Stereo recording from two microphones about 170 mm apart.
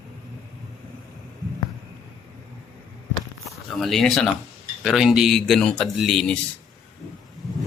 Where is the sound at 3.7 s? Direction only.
Centre (ahead or behind).